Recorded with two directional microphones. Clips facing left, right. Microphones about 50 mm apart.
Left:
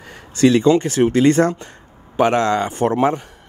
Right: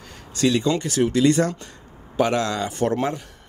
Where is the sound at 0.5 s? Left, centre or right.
Left.